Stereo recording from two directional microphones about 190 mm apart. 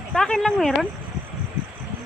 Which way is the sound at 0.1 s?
5° left (ahead or behind).